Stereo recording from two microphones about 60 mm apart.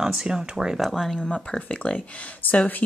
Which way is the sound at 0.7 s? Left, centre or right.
Centre.